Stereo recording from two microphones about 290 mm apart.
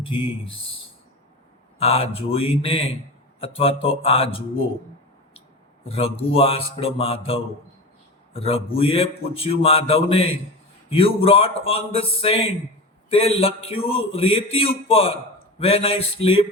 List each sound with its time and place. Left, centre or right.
0.0 s speech: centre
1.8 s a man's voice: centre
5.8 s a man's voice: centre